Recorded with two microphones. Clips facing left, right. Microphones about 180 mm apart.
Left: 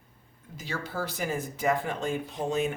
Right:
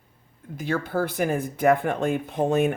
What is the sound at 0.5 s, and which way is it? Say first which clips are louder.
Speech: right 9 dB; 55° right (ahead or behind).